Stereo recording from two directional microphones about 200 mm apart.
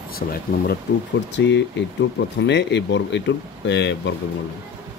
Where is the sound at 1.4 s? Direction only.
60° left (ahead or behind).